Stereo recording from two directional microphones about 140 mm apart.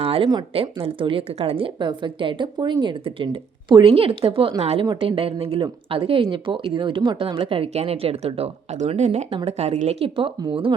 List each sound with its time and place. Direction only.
0.0 s a woman's voice: 40° right (ahead or behind)